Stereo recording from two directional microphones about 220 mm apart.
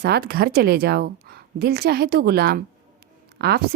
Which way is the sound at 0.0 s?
45° right (ahead or behind).